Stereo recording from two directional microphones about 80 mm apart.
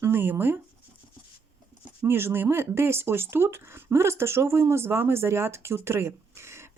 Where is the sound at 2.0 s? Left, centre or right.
Right.